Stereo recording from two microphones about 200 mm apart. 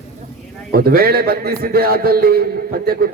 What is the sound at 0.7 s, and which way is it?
A man's voice, 50° right (ahead or behind).